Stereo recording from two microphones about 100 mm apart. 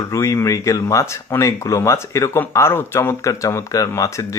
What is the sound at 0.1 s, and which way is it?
Speech, 30° left (ahead or behind).